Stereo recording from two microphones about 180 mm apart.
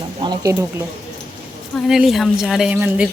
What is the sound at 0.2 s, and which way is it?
Speech, 25° right (ahead or behind).